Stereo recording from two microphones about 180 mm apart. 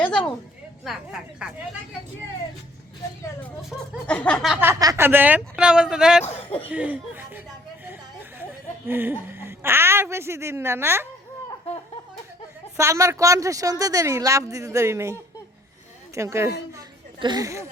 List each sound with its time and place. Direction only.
0.9 s a sound: 5° right (ahead or behind)
3.7 s a sound: 5° left (ahead or behind)
4.6 s speech: 15° right (ahead or behind)
6.3 s speech: 30° left (ahead or behind)
6.7 s speech: 10° right (ahead or behind)
8.9 s speech: 10° right (ahead or behind)
12.7 s a woman's voice: 15° right (ahead or behind)